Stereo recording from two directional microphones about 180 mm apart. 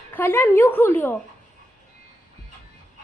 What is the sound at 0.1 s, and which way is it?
A woman's voice, 10° left (ahead or behind).